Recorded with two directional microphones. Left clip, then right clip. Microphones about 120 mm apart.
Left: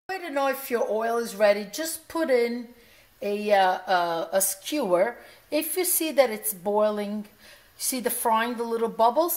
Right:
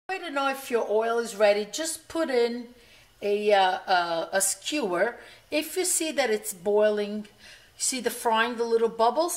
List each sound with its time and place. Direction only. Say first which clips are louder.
0.1 s speech: left 1 dB; 35° left (ahead or behind)